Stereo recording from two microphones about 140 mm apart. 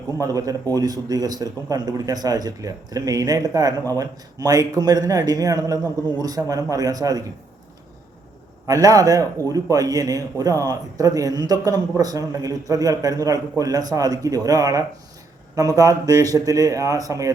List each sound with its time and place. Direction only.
0.2 s a man's voice: 25° right (ahead or behind)
8.6 s a man's voice: 25° right (ahead or behind)